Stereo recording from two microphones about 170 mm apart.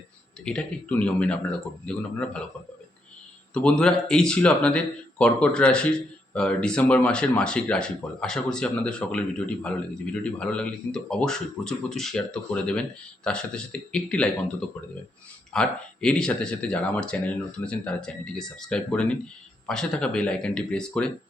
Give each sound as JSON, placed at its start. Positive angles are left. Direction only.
{"t": 0.4, "sound": "speech", "side_deg": 5}
{"t": 3.5, "sound": "speech", "side_deg": 5}
{"t": 15.5, "sound": "speech", "side_deg": 5}